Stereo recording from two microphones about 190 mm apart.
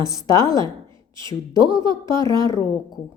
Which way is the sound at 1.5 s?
25° right (ahead or behind).